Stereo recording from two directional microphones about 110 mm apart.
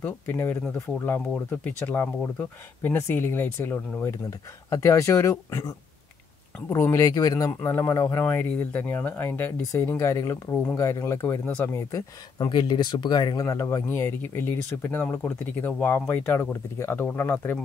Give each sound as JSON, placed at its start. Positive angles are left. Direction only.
{"t": 0.0, "sound": "speech", "side_deg": 20}
{"t": 4.6, "sound": "speech", "side_deg": 30}
{"t": 6.7, "sound": "speech", "side_deg": 25}
{"t": 12.4, "sound": "speech", "side_deg": 40}